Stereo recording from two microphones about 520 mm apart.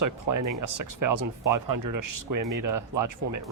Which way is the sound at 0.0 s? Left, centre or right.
Right.